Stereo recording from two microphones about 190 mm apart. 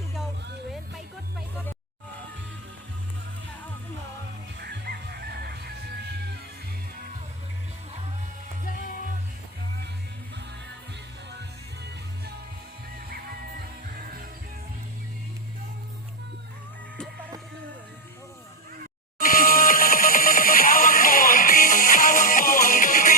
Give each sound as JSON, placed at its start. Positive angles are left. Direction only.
{"t": 4.6, "sound": "music", "side_deg": -60}
{"t": 11.3, "sound": "music", "side_deg": -60}
{"t": 19.2, "sound": "music", "side_deg": 45}